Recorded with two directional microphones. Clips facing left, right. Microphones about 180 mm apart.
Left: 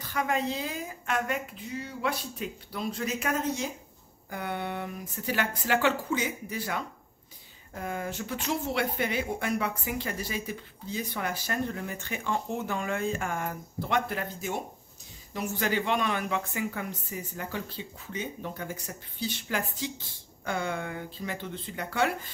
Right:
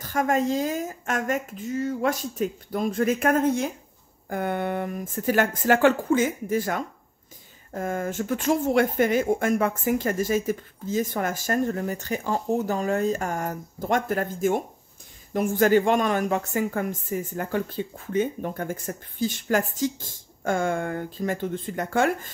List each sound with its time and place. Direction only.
0.0 s speech: 45° right (ahead or behind)